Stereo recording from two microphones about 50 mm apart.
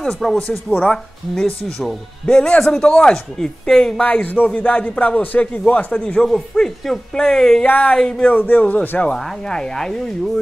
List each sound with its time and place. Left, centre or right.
0.0 s speech: centre
2.2 s speech: centre
4.0 s speech: left
5.9 s speech: left
7.6 s speech: left
9.1 s speech: centre